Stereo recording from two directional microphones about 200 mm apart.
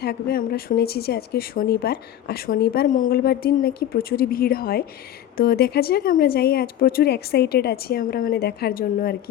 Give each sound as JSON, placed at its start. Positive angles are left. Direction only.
{"t": 0.0, "sound": "speech", "side_deg": 50}